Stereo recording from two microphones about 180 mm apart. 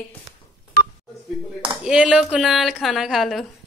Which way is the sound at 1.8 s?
5° right (ahead or behind).